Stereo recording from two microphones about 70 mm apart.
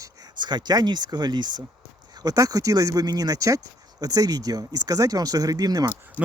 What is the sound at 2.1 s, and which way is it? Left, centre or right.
Speech, right.